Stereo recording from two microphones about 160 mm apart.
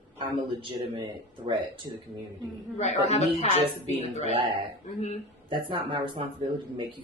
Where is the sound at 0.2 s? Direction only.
35° right (ahead or behind).